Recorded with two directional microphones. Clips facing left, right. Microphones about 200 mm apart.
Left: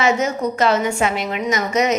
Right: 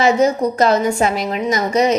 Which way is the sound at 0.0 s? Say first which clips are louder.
Right 4 dB; 35° right (ahead or behind).